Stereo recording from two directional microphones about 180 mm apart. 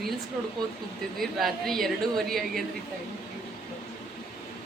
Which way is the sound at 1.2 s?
Centre (ahead or behind).